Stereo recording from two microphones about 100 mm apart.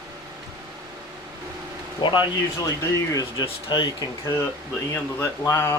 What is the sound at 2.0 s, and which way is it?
Speech, 55° left (ahead or behind).